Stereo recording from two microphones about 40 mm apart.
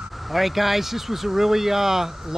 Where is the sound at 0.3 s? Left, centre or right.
Centre.